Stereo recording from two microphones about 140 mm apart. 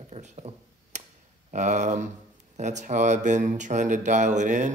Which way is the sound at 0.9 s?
55° right (ahead or behind).